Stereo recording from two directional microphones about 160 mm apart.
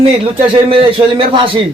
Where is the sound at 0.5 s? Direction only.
35° right (ahead or behind).